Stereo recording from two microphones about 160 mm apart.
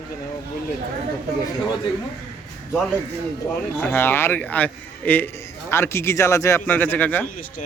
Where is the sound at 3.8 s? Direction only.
10° left (ahead or behind).